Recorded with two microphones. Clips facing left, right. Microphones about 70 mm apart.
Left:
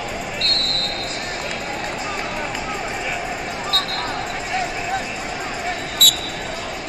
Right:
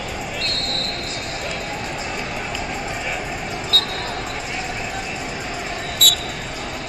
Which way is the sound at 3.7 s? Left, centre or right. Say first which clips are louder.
Right 1 dB; left.